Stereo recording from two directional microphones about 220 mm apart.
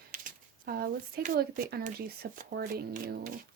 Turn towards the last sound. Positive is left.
turn(degrees=-40)  # may be behind; listen again after turning